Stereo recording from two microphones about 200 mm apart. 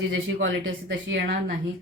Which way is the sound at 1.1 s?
50° right (ahead or behind).